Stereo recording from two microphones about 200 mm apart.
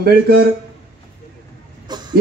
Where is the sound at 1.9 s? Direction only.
20° right (ahead or behind).